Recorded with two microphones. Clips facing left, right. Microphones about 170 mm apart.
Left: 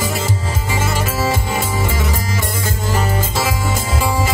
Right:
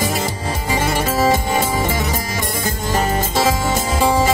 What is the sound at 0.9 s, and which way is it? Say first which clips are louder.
Music: right 5 dB; 50° right (ahead or behind).